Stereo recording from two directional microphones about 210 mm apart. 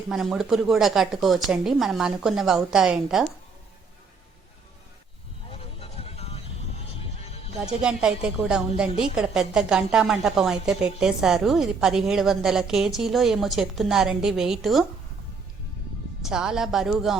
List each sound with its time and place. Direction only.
0.1 s a woman's voice: centre (ahead or behind)
5.5 s music: 30° left (ahead or behind)
7.8 s a woman's voice: 5° right (ahead or behind)
16.2 s a woman's voice: 5° right (ahead or behind)